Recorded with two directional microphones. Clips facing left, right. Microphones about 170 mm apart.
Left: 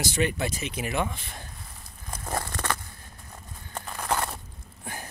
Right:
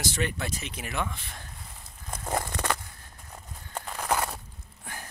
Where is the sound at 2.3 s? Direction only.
15° right (ahead or behind).